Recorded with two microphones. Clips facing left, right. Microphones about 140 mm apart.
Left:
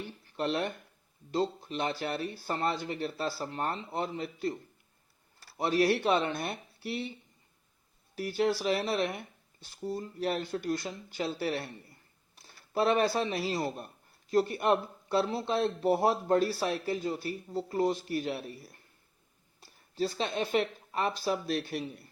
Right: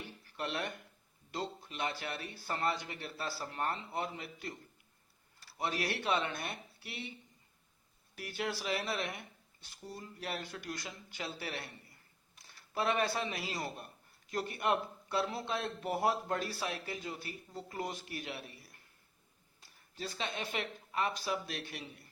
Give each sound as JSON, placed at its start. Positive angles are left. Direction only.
{"t": 0.3, "sound": "speech", "side_deg": 30}
{"t": 5.5, "sound": "speech", "side_deg": 35}
{"t": 8.1, "sound": "speech", "side_deg": 30}
{"t": 12.7, "sound": "speech", "side_deg": 30}